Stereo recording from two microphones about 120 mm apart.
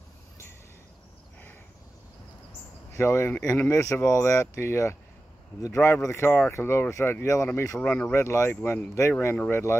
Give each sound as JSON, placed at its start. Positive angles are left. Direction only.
{"t": 2.9, "sound": "speech", "side_deg": 20}